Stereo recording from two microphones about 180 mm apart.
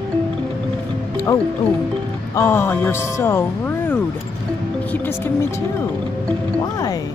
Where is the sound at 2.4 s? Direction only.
10° left (ahead or behind).